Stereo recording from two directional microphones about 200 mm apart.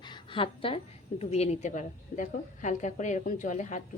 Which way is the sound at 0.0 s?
25° left (ahead or behind).